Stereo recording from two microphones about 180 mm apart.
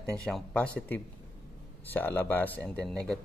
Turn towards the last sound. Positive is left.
turn(degrees=5)  # may be behind; listen again after turning